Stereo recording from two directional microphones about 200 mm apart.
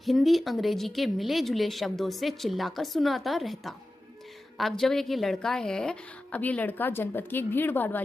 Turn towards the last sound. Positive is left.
turn(degrees=10)  # may be behind; listen again after turning